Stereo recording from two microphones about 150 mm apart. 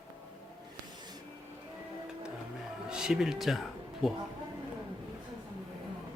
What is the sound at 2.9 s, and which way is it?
Speech, 5° right (ahead or behind).